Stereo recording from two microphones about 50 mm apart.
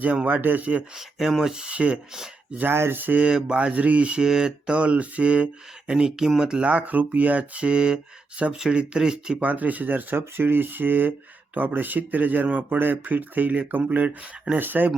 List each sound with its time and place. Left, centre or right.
0.0 s speech: right
1.3 s speech: centre
1.6 s speech: right
2.7 s speech: right
3.0 s speech: right
3.2 s speech: centre
5.9 s speech: centre
6.7 s speech: right; by 9.4 s centre
9.4 s speech: right